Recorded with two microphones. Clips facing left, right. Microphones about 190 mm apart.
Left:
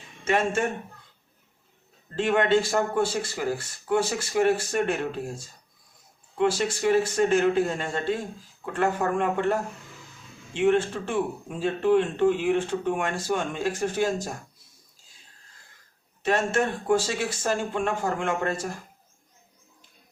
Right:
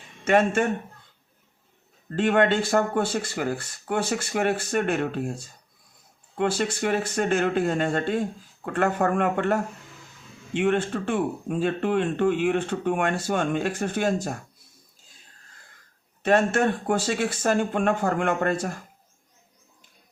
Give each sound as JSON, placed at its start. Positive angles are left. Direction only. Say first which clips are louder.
{"t": 0.3, "sound": "speech", "louder": "right 4 dB", "side_deg": -55}
{"t": 2.1, "sound": "speech", "louder": "right 1 dB", "side_deg": -55}
{"t": 6.4, "sound": "speech", "louder": "left 1 dB", "side_deg": -55}
{"t": 16.2, "sound": "speech", "louder": "right 4 dB", "side_deg": -55}